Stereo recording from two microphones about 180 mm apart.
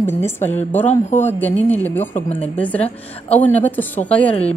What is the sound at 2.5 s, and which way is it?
Speech, 10° left (ahead or behind).